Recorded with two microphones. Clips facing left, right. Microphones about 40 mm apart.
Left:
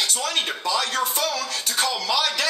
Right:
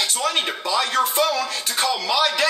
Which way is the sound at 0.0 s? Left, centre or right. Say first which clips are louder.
Right 2 dB; centre.